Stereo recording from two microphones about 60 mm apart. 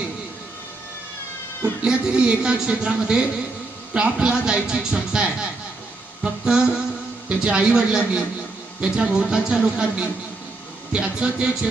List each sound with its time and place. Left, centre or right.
1.9 s speech: centre